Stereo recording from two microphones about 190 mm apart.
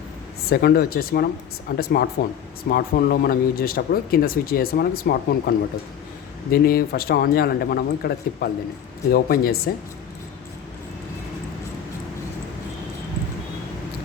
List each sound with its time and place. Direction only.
0.4 s speech: 55° left (ahead or behind)